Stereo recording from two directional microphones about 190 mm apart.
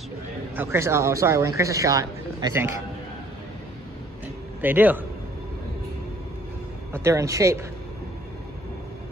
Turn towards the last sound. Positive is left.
turn(degrees=-15)  # may be behind; listen again after turning